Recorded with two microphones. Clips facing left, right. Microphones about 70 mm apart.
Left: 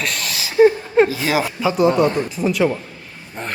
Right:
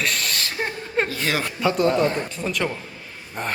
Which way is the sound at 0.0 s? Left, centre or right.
Centre.